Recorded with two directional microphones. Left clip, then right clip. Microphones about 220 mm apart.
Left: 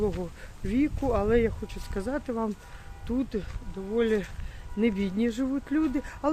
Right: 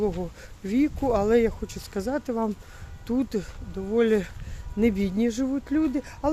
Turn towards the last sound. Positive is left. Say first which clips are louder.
# right 2 dB
turn(degrees=-10)  # may be behind; listen again after turning